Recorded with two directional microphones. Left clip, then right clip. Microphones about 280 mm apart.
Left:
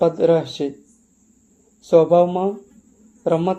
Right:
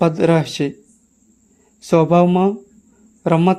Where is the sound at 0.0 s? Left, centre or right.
Right.